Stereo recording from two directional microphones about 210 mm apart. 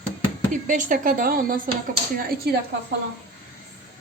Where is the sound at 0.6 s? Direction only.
40° right (ahead or behind).